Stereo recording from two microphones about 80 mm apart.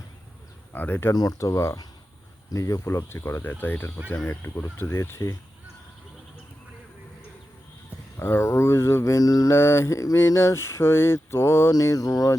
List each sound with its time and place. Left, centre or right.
0.7 s speech: left
1.1 s a sound: left
1.4 s speech: left
8.2 s speech: left
9.5 s speech: left
11.7 s a sound: left